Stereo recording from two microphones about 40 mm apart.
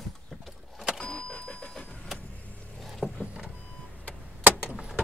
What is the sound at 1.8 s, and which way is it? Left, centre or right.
Vehicle, left.